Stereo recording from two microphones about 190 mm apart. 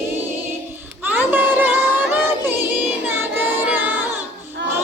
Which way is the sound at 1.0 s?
10° right (ahead or behind).